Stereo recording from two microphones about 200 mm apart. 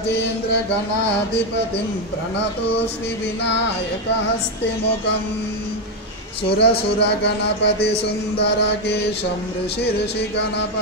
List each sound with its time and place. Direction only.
6.6 s a man's voice: 60° left (ahead or behind)